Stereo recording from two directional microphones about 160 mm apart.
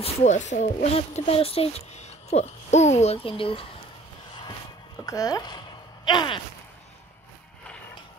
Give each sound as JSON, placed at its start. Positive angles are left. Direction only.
{"t": 0.0, "sound": "speech", "side_deg": 45}
{"t": 5.0, "sound": "speech", "side_deg": 20}